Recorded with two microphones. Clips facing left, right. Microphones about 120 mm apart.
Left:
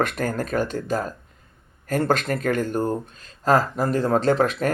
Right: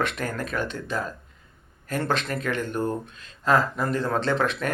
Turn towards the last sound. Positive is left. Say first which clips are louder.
# left 5 dB
turn(degrees=40)  # may be behind; listen again after turning